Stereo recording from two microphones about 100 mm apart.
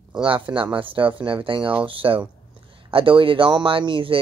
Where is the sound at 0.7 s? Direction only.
60° right (ahead or behind).